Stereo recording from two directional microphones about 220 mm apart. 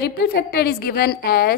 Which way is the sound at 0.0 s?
45° left (ahead or behind).